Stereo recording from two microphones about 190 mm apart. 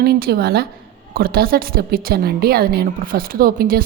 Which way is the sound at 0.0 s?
55° right (ahead or behind).